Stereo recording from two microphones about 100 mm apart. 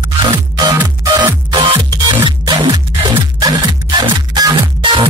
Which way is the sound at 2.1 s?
55° right (ahead or behind).